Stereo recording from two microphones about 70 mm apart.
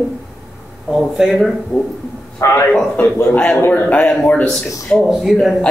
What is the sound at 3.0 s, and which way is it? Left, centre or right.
A man's voice, left.